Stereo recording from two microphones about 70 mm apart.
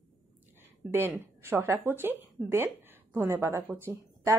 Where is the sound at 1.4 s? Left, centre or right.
Right.